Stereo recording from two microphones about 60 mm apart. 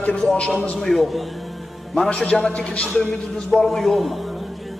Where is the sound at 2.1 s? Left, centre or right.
Centre.